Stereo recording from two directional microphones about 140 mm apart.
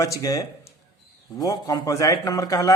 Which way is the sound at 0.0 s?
25° left (ahead or behind).